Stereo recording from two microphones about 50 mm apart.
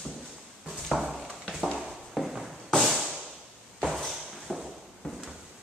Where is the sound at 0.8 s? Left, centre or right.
Centre.